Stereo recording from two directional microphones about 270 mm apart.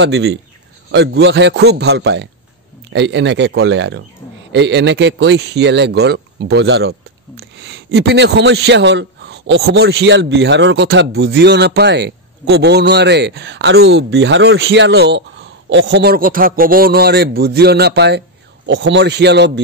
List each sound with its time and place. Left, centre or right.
0.0 s a man's voice: right